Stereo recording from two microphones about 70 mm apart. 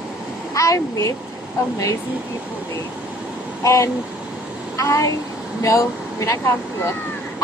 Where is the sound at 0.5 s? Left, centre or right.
Left.